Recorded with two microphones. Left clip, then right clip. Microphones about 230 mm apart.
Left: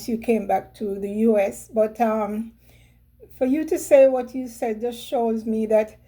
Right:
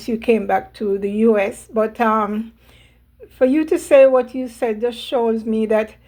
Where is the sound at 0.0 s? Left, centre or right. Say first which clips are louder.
Right 5 dB; centre.